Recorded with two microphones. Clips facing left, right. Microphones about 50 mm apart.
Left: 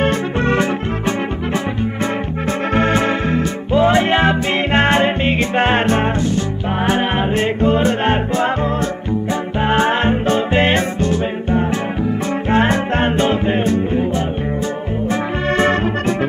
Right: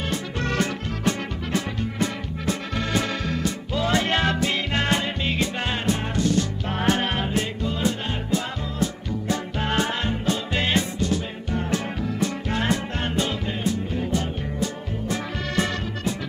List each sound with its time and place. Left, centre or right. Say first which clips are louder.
0.4 s music: left 8 dB; left
2.7 s music: left 12 dB; left
4.7 s music: left 12 dB; left
6.8 s music: left 6 dB; left
7.3 s music: left 11 dB; left
9.6 s music: left 11 dB; left
15.5 s music: left 11 dB; left